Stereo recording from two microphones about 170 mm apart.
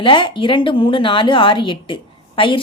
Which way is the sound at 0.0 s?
30° left (ahead or behind).